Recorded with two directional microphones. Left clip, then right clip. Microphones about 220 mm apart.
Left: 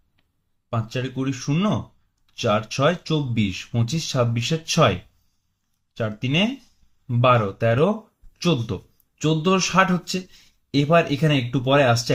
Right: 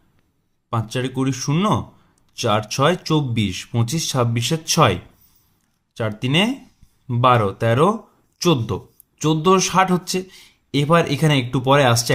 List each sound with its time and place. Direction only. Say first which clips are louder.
0.7 s speech: right 4 dB; 40° right (ahead or behind)